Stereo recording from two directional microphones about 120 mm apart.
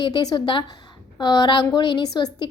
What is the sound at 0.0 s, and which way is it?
A woman's voice, 35° left (ahead or behind).